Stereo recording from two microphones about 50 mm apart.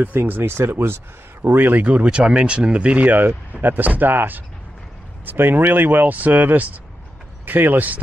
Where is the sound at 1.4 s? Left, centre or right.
Right.